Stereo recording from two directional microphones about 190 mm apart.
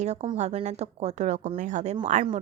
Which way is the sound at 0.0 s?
35° right (ahead or behind).